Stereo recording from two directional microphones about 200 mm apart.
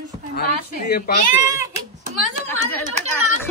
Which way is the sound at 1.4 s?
15° right (ahead or behind).